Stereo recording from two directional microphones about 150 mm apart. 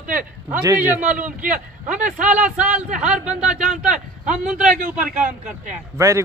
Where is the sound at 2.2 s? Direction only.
10° right (ahead or behind).